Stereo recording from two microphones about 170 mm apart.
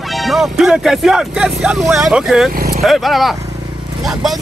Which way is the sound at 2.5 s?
60° right (ahead or behind).